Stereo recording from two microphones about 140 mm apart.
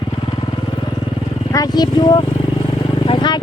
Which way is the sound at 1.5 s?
25° left (ahead or behind).